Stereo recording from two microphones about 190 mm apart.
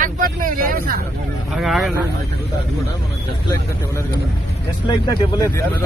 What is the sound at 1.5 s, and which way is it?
Speech, centre (ahead or behind).